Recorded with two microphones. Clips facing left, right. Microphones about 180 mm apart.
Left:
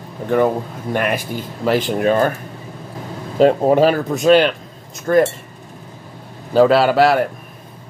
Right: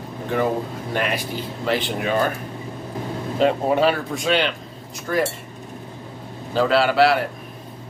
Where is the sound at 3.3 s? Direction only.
40° left (ahead or behind).